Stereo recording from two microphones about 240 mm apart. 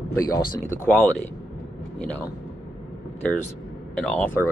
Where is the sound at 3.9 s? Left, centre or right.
Centre.